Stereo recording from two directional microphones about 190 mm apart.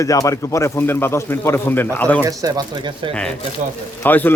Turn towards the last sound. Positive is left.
turn(degrees=10)  # may be behind; listen again after turning